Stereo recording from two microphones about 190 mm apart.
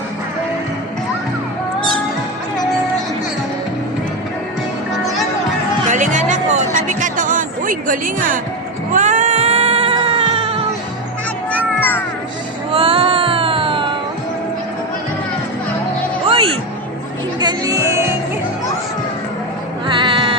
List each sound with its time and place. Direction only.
5.9 s music: 40° right (ahead or behind)
8.9 s cat: 40° right (ahead or behind)
11.8 s music: 10° left (ahead or behind)
12.7 s music: 30° right (ahead or behind)
16.3 s music: 30° right (ahead or behind)
19.9 s music: 25° right (ahead or behind)